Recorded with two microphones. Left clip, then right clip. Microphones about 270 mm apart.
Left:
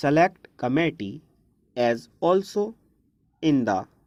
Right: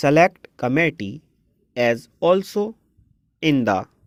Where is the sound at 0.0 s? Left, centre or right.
Right.